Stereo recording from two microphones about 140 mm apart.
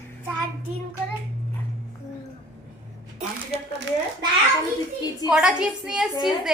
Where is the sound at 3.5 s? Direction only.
45° right (ahead or behind).